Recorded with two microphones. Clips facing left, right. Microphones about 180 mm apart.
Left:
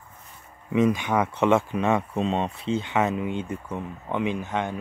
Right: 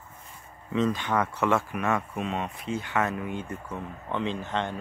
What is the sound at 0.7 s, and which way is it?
Speech, 15° left (ahead or behind).